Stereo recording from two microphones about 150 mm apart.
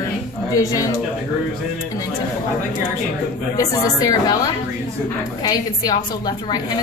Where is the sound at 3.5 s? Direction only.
25° left (ahead or behind).